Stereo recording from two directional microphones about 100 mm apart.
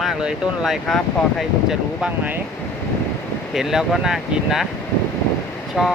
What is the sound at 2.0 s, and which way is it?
Speech, 15° right (ahead or behind).